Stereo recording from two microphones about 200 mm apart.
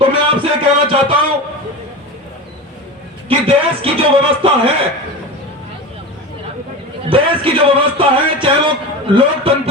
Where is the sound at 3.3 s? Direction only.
30° right (ahead or behind).